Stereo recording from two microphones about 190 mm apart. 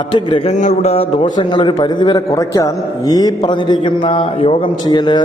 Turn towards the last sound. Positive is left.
turn(degrees=20)  # may be behind; listen again after turning